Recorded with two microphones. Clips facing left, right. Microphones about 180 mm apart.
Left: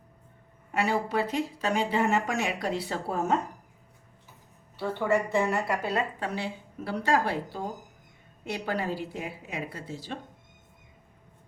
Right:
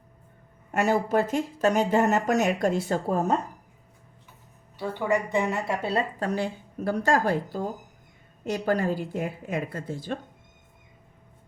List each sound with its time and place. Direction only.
0.7 s speech: 45° right (ahead or behind)
4.8 s a woman's voice: 15° right (ahead or behind)
6.1 s speech: 45° right (ahead or behind)